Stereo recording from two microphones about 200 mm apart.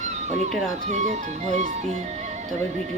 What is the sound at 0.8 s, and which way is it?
Speech, 40° right (ahead or behind).